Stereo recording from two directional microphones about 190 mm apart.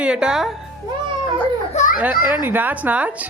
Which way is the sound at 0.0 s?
5° right (ahead or behind).